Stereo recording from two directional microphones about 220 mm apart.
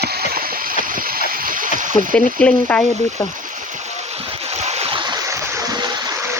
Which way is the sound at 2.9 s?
30° right (ahead or behind).